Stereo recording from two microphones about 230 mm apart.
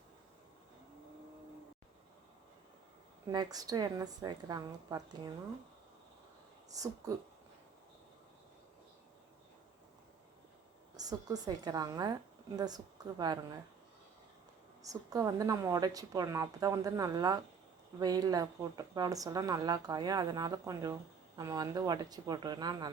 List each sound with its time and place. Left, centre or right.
3.2 s a woman's voice: centre
6.7 s a woman's voice: centre
10.9 s a woman's voice: centre
14.8 s a woman's voice: centre